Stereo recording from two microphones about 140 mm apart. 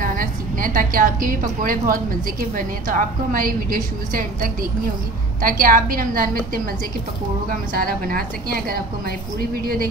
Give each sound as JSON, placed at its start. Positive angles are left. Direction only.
{"t": 0.0, "sound": "a woman's voice", "side_deg": -80}